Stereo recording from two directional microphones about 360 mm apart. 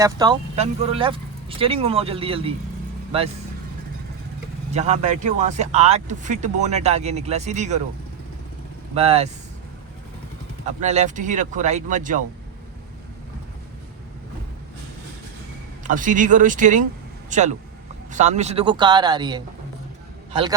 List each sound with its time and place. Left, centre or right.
0.0 s speech: centre
4.7 s speech: centre
9.0 s speech: centre
10.8 s speech: centre
15.8 s speech: right